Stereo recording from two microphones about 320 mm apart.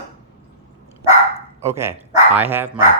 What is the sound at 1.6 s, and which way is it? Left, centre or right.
Speech, centre.